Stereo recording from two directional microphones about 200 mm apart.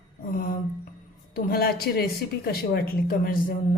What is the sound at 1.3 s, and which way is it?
A woman's voice, 50° left (ahead or behind).